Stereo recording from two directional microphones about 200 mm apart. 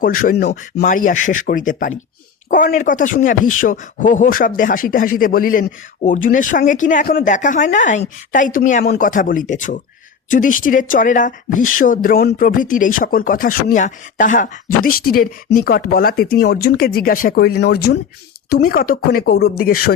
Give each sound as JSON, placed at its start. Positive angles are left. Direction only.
{"t": 0.0, "sound": "speech", "side_deg": 45}